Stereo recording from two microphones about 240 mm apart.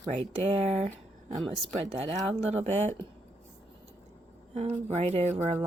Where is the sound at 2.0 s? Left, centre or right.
Right.